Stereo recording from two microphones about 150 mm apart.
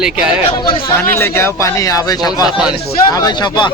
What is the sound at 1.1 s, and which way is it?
Speech, 15° left (ahead or behind).